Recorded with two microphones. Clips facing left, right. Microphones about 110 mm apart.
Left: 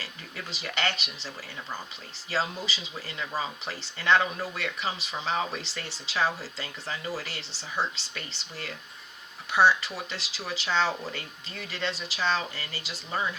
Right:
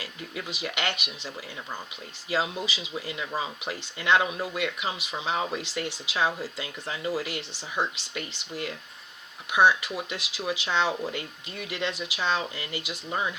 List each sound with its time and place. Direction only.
0.0 s speech: 15° right (ahead or behind)
2.3 s speech: 15° right (ahead or behind)